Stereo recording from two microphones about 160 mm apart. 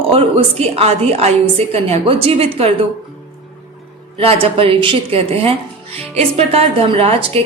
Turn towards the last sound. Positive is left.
turn(degrees=-35)  # may be behind; listen again after turning